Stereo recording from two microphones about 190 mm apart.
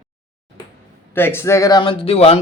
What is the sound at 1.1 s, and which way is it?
Speech, 10° left (ahead or behind).